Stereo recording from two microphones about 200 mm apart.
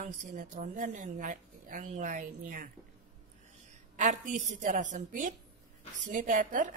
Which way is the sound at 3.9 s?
40° right (ahead or behind).